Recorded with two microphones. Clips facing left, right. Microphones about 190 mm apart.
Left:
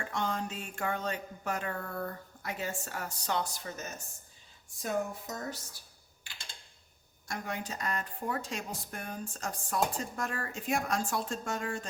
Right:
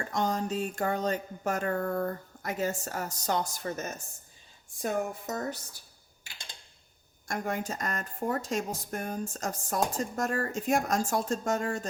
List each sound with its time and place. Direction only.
0.0 s a sound: 40° right (ahead or behind)
4.8 s speech: 50° right (ahead or behind)
7.3 s speech: 50° right (ahead or behind)